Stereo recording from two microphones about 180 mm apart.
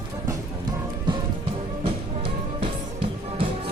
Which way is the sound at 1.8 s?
30° right (ahead or behind).